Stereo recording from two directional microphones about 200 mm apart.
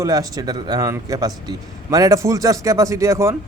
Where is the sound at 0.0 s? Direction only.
20° right (ahead or behind).